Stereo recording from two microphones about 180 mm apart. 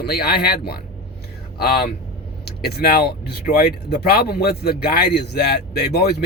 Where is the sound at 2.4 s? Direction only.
60° left (ahead or behind).